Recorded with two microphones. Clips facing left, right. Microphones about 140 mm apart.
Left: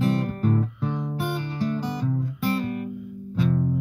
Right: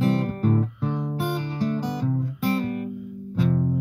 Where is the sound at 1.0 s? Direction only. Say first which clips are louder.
Right 1 dB; 20° right (ahead or behind).